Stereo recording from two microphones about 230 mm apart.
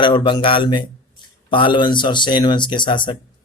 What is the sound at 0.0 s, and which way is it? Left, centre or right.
A man's voice, left.